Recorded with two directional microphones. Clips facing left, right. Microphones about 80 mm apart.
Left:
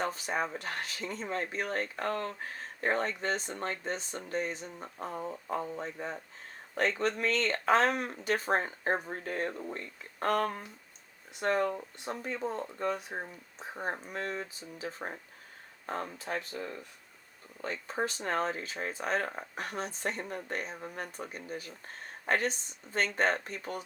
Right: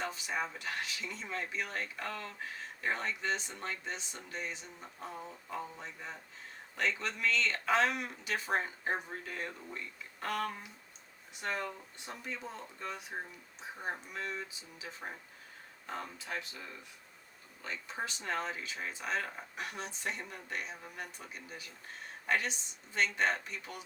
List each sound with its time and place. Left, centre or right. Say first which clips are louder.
0.0 s speech: left 4 dB; left